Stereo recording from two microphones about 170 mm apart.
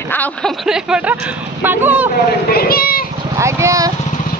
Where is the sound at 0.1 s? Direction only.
10° left (ahead or behind).